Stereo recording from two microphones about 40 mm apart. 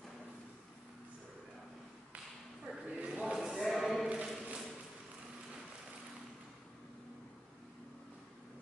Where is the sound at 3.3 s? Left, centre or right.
Centre.